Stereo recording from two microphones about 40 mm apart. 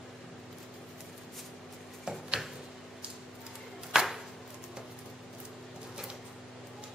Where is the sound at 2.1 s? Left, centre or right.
Centre.